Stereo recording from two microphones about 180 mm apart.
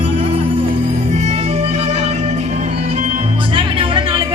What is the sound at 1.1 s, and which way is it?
Music, 40° right (ahead or behind).